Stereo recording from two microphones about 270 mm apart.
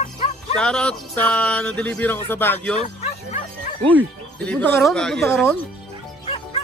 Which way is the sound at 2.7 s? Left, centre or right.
Left.